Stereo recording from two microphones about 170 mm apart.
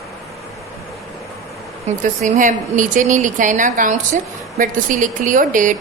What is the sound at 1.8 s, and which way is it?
A woman's voice, 45° right (ahead or behind).